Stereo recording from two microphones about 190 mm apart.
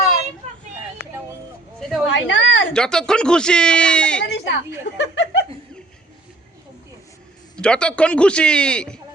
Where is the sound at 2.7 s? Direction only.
5° left (ahead or behind).